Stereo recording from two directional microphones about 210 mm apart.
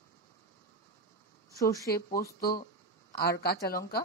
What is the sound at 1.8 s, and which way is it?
Speech, 45° left (ahead or behind).